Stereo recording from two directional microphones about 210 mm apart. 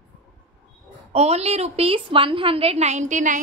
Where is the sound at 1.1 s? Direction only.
30° right (ahead or behind).